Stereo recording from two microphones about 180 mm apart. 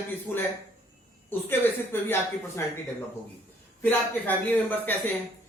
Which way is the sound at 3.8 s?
10° left (ahead or behind).